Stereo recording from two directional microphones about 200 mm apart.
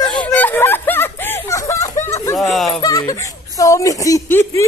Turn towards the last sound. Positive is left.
turn(degrees=15)  # may be behind; listen again after turning